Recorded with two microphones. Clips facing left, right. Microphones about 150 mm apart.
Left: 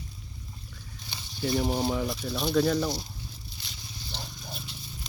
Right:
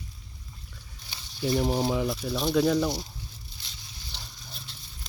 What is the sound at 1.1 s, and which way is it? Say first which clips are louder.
Speech: right 1 dB; centre (ahead or behind).